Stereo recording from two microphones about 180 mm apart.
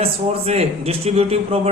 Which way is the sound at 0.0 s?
35° right (ahead or behind).